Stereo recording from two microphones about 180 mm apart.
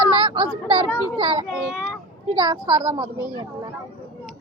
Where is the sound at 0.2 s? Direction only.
25° right (ahead or behind).